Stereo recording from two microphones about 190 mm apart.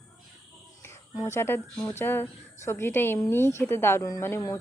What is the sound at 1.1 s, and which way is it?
Speech, 15° left (ahead or behind).